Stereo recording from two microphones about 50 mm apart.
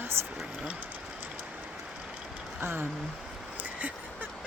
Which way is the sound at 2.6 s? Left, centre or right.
Right.